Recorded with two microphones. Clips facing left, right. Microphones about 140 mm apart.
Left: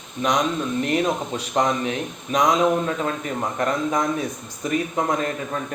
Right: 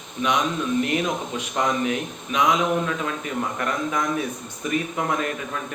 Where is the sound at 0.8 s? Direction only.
35° left (ahead or behind).